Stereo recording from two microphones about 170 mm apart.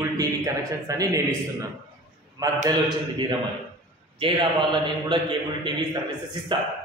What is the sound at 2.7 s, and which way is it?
A man's voice, 25° right (ahead or behind).